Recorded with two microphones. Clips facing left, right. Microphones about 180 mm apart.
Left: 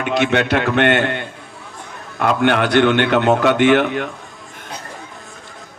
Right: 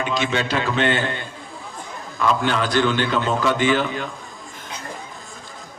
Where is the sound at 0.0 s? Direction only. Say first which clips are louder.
Left 5 dB; 65° left (ahead or behind).